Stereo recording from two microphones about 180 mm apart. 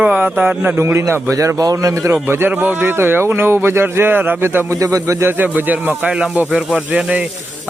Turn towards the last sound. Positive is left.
turn(degrees=-5)  # may be behind; listen again after turning